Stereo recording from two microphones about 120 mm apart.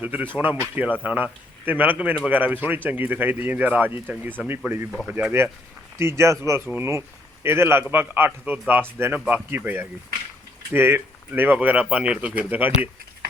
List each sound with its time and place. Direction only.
0.0 s a man's voice: 15° right (ahead or behind)